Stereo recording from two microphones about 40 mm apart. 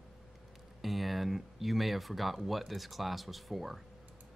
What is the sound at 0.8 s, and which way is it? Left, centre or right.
Speech, centre.